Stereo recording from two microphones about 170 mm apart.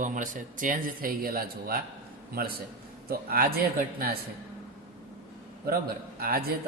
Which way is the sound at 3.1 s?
60° right (ahead or behind).